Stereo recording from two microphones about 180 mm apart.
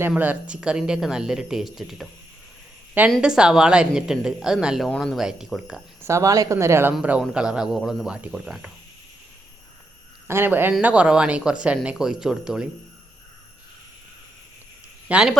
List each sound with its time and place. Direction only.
0.1 s a woman's voice: 10° right (ahead or behind)
3.1 s a woman's voice: 5° right (ahead or behind)
6.1 s a woman's voice: 15° right (ahead or behind)
10.2 s a woman's voice: 10° right (ahead or behind)
15.0 s a man's voice: 5° right (ahead or behind)